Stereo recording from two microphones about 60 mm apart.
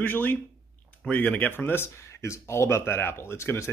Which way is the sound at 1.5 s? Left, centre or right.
Left.